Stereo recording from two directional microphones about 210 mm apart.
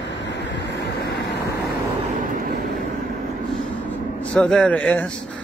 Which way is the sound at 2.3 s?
40° right (ahead or behind).